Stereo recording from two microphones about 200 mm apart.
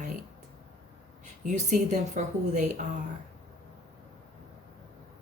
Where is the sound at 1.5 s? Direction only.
35° right (ahead or behind).